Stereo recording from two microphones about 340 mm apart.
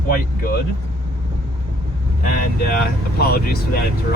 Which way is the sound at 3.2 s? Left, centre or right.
Left.